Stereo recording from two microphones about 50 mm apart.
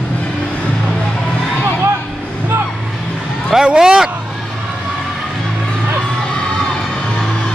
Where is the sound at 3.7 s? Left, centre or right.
Centre.